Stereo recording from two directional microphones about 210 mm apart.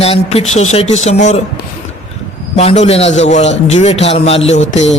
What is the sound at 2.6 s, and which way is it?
A man's voice, 30° left (ahead or behind).